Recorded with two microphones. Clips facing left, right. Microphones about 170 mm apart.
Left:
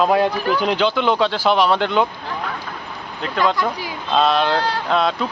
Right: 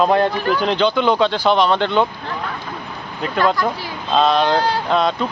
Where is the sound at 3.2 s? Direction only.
5° right (ahead or behind).